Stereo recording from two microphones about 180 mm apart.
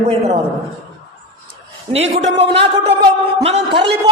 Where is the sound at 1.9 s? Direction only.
35° right (ahead or behind).